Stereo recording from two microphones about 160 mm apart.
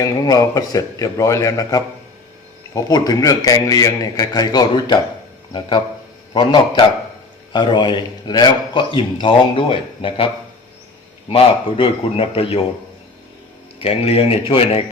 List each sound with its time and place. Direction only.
0.0 s a man's voice: 20° left (ahead or behind)
11.3 s a man's voice: 35° left (ahead or behind)
13.7 s a man's voice: 35° left (ahead or behind)